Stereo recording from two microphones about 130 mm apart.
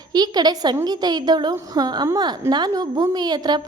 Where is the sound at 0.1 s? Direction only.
30° right (ahead or behind).